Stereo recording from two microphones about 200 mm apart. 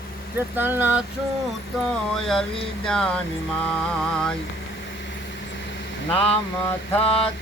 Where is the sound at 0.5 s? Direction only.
10° right (ahead or behind).